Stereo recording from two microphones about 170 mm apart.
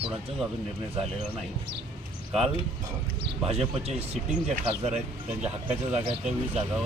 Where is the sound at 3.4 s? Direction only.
40° right (ahead or behind).